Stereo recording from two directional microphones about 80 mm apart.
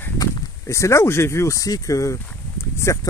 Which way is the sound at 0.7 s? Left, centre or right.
Left.